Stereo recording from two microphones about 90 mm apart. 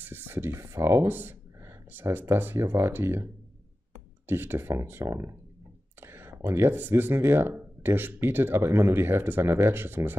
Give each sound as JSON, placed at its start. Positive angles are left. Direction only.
{"t": 0.0, "sound": "speech", "side_deg": -20}
{"t": 4.3, "sound": "speech", "side_deg": -25}